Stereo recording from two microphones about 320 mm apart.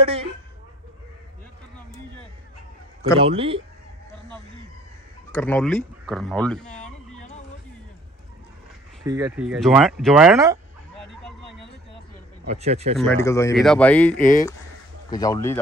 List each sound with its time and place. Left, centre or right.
0.0 s speech: centre
3.2 s speech: centre
5.3 s speech: centre
9.0 s speech: centre
12.4 s speech: centre
12.9 s speech: centre